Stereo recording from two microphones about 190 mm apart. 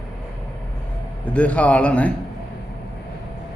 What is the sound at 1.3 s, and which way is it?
Speech, 5° left (ahead or behind).